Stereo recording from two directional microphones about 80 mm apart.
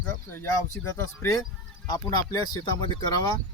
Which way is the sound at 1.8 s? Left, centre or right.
Left.